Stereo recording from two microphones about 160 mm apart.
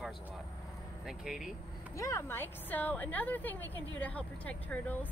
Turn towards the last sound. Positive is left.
turn(degrees=10)  # may be behind; listen again after turning